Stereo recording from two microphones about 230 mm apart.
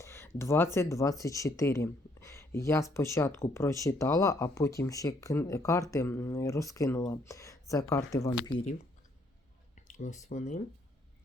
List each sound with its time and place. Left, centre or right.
0.0 s speech: centre
9.7 s speech: left